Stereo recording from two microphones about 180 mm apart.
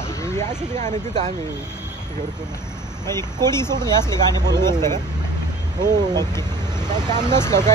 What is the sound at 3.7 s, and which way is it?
Speech, 25° right (ahead or behind).